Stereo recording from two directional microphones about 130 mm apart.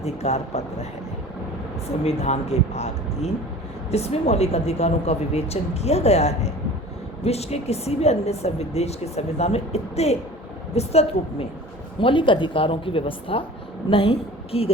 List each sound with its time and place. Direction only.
0.0 s speech: 55° left (ahead or behind)
2.0 s speech: 55° left (ahead or behind)
11.9 s a woman's voice: 40° left (ahead or behind)